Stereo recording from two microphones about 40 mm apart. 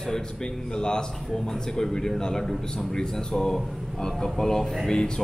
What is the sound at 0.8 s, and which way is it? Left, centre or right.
A man's voice, centre.